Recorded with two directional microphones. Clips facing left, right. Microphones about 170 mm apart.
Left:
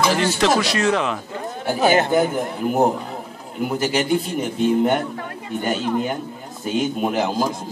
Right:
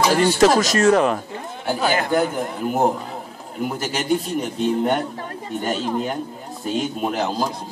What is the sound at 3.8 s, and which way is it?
A man's voice, centre (ahead or behind).